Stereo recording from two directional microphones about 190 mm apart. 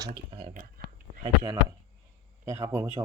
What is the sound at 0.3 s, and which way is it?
Speech, 30° right (ahead or behind).